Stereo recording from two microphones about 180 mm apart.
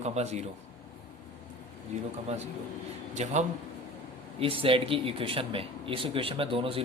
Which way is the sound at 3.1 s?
40° right (ahead or behind).